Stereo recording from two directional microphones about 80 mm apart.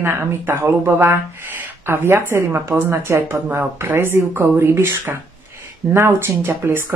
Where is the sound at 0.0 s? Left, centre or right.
Right.